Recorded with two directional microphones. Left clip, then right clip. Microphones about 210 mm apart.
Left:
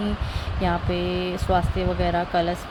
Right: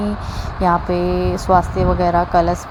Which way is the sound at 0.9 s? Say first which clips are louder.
Right 7 dB; 40° right (ahead or behind).